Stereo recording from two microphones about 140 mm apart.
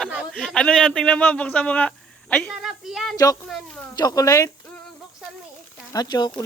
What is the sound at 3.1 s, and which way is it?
A child's voice, 25° left (ahead or behind).